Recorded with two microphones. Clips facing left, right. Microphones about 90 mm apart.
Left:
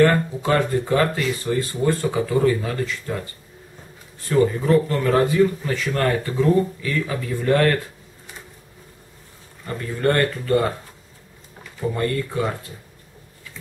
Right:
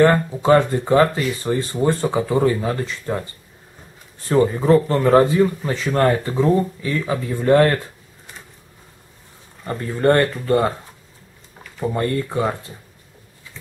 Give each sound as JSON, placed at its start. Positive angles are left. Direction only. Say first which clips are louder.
{"t": 0.0, "sound": "speech", "louder": "right 2 dB", "side_deg": -25}
{"t": 4.3, "sound": "speech", "louder": "right 2 dB", "side_deg": -30}
{"t": 9.7, "sound": "speech", "louder": "right 4 dB", "side_deg": -25}
{"t": 11.8, "sound": "speech", "louder": "right 2 dB", "side_deg": -25}